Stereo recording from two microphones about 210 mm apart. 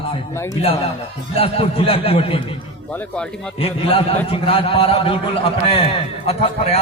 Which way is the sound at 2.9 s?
5° left (ahead or behind).